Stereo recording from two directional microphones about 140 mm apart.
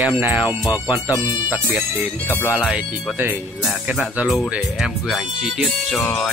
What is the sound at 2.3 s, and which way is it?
Speech, 15° left (ahead or behind).